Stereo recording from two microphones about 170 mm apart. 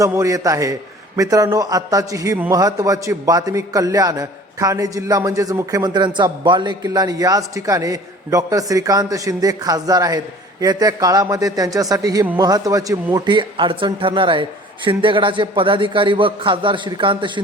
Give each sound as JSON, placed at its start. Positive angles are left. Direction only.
{"t": 0.0, "sound": "a man's voice", "side_deg": -20}